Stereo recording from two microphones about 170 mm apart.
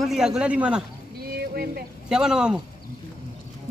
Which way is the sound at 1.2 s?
65° right (ahead or behind).